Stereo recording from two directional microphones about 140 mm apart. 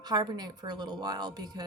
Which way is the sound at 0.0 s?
30° right (ahead or behind).